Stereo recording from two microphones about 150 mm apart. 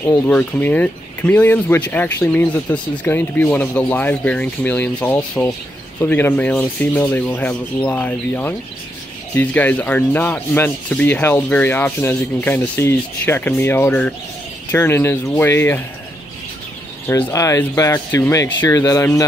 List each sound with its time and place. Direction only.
0.0 s speech: 15° left (ahead or behind)
17.1 s speech: 20° left (ahead or behind)